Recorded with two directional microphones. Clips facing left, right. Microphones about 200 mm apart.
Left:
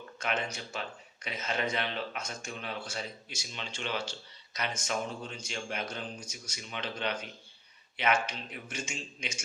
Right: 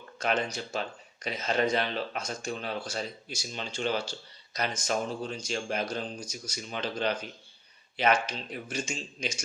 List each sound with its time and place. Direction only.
0.2 s speech: 35° right (ahead or behind)